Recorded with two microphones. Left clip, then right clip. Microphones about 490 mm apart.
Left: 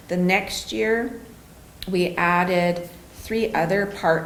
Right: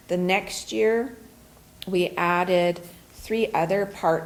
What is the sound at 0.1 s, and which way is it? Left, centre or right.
Speech, right.